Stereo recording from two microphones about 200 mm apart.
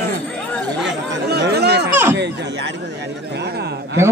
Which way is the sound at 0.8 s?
55° right (ahead or behind).